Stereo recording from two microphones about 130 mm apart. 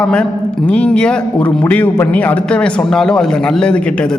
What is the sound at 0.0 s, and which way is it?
A man's voice, 10° left (ahead or behind).